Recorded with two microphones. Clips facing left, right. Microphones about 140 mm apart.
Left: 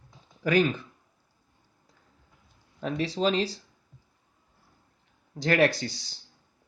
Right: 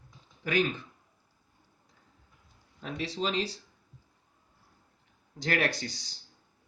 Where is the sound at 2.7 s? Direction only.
40° left (ahead or behind).